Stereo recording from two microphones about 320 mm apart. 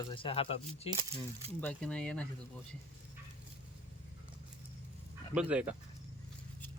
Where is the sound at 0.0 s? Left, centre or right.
Centre.